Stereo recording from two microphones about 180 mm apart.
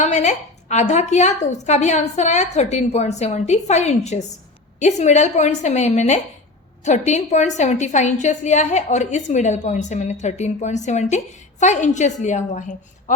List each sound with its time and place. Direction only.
0.0 s a woman's voice: 40° left (ahead or behind)